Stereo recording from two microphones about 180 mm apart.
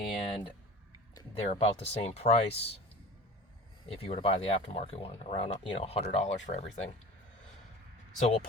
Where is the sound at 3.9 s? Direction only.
30° left (ahead or behind).